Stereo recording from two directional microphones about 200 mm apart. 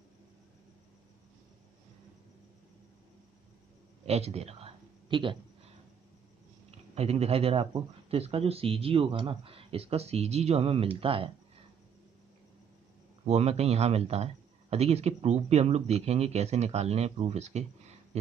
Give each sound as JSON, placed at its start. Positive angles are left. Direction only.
{"t": 4.0, "sound": "a sound", "side_deg": -30}
{"t": 7.0, "sound": "speech", "side_deg": -30}
{"t": 13.2, "sound": "speech", "side_deg": -30}